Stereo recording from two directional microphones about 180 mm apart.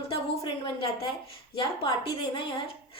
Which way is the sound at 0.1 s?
25° left (ahead or behind).